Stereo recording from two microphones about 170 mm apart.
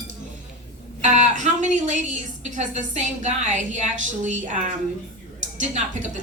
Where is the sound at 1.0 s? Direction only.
45° right (ahead or behind).